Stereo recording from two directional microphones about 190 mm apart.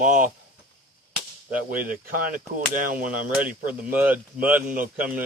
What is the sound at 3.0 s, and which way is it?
Speech, 5° right (ahead or behind).